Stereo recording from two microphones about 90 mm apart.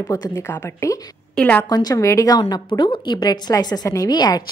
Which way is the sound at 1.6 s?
45° left (ahead or behind).